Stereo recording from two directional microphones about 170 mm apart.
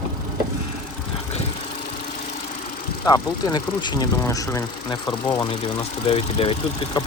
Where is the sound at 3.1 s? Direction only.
25° left (ahead or behind).